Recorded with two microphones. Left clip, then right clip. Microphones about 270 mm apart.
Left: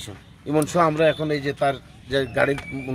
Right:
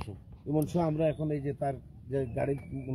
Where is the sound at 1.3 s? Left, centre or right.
Centre.